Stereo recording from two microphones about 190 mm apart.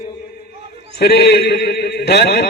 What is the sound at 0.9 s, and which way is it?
A man's voice, 60° left (ahead or behind).